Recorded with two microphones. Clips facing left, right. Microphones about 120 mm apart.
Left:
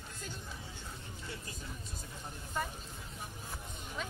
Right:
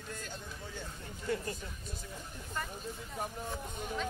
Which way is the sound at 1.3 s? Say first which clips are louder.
Right 13 dB; 45° right (ahead or behind).